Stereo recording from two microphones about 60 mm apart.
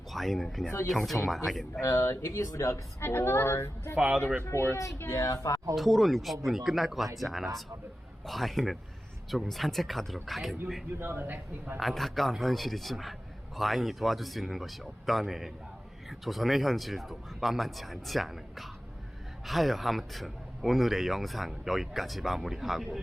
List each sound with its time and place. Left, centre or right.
0.1 s speech: centre
1.8 s speech: left
3.0 s a woman's voice: left
3.9 s speech: centre
4.5 s a child's voice: left
5.0 s speech: left
5.7 s speech: centre
11.0 s a man's voice: right
11.8 s speech: centre